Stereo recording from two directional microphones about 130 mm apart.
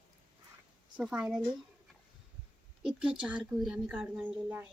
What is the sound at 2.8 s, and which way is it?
A woman's voice, 5° right (ahead or behind).